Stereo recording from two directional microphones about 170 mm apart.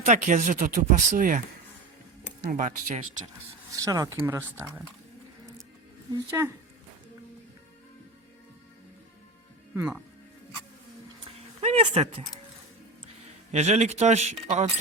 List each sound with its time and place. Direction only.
0.0 s speech: 45° right (ahead or behind)
2.5 s speech: 50° right (ahead or behind)
3.8 s speech: 20° right (ahead or behind)
6.1 s speech: 15° right (ahead or behind)
11.2 s a sound: 40° right (ahead or behind)
13.5 s speech: 40° right (ahead or behind)